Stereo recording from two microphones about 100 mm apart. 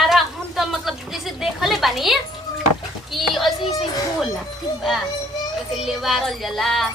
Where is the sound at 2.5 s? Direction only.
40° left (ahead or behind).